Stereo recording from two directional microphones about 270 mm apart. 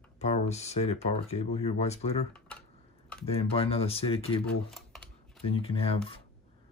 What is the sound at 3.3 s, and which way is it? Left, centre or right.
Speech, left.